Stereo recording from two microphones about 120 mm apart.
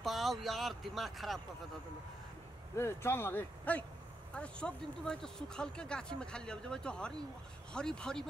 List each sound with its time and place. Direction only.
0.0 s speech: centre (ahead or behind)
2.7 s speech: 20° left (ahead or behind); by 8.3 s 5° left (ahead or behind)